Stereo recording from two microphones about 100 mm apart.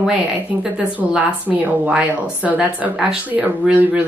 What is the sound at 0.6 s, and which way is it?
Speech, 10° right (ahead or behind).